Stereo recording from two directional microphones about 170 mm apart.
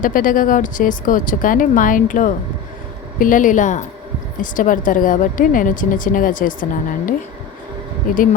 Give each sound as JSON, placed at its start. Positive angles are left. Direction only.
{"t": 0.0, "sound": "a woman's voice", "side_deg": 50}